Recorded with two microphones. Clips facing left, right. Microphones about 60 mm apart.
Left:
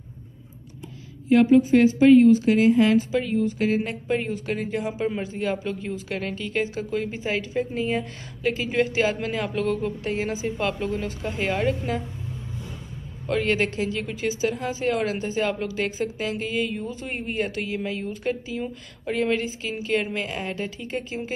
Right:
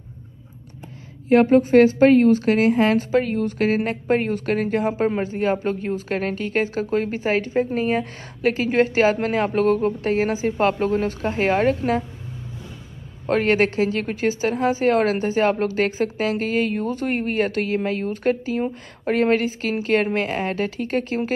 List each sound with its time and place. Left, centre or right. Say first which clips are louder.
1.3 s a woman's voice: right 3 dB; right
13.3 s a woman's voice: right 5 dB; right